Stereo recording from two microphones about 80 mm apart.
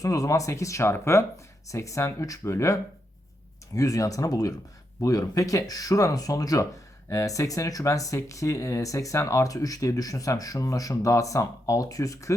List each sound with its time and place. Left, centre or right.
0.0 s speech: left
3.8 s speech: left